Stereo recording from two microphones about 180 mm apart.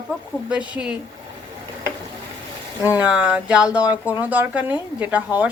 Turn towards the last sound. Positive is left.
turn(degrees=-10)  # may be behind; listen again after turning